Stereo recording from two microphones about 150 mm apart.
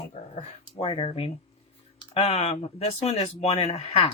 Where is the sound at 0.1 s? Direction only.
40° left (ahead or behind).